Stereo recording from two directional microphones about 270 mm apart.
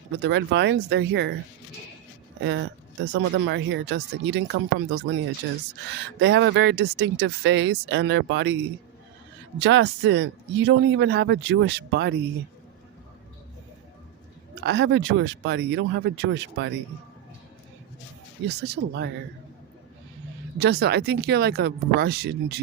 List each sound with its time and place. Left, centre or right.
0.2 s speech: right
2.4 s speech: right
6.1 s speech: right
9.6 s speech: right
14.6 s speech: right
18.4 s speech: right
20.6 s speech: right